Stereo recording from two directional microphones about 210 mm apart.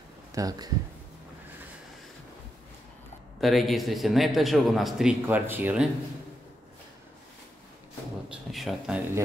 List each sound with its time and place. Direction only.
0.3 s speech: 15° right (ahead or behind)
3.3 s a man's voice: centre (ahead or behind)
8.3 s a man's voice: centre (ahead or behind)